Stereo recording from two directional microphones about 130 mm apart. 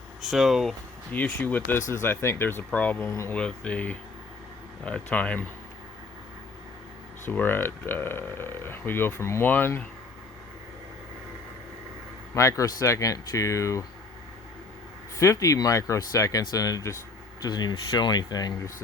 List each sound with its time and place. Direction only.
0.2 s speech: centre (ahead or behind)
1.1 s speech: 10° left (ahead or behind)
7.3 s speech: 15° left (ahead or behind)
12.3 s speech: 25° left (ahead or behind)
15.2 s speech: 25° left (ahead or behind)